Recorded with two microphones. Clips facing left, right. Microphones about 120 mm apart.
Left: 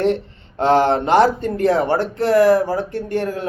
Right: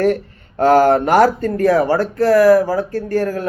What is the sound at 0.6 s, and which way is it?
A man's voice, 25° left (ahead or behind).